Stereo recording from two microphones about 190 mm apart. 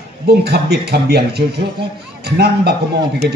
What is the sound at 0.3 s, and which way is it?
A man's voice, 60° right (ahead or behind).